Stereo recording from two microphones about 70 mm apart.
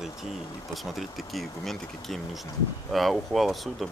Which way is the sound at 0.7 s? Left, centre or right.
Centre.